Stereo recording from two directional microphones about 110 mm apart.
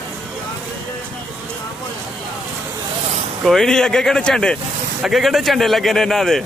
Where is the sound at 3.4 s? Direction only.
5° left (ahead or behind).